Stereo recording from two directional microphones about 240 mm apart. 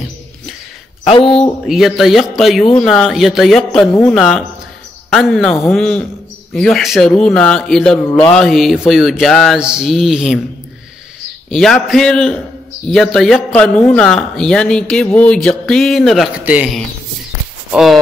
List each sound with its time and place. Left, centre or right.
1.0 s speech: left
1.7 s speech: centre
11.5 s speech: centre